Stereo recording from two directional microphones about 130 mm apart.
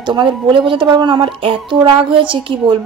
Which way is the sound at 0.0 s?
35° right (ahead or behind).